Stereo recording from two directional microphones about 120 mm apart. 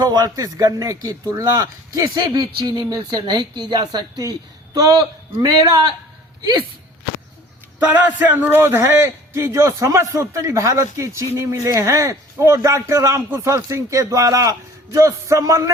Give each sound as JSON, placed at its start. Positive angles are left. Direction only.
{"t": 0.0, "sound": "speech", "side_deg": -35}
{"t": 7.8, "sound": "a man's voice", "side_deg": -15}